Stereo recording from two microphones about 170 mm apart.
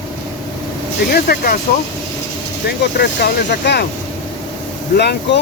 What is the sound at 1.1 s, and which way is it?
Speech, 65° left (ahead or behind).